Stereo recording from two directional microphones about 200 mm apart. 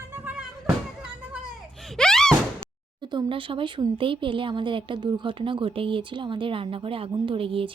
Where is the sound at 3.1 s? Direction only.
25° right (ahead or behind).